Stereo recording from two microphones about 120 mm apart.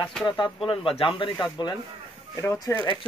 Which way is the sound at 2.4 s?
25° left (ahead or behind).